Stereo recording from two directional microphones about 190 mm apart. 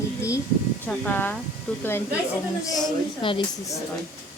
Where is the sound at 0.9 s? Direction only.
10° left (ahead or behind).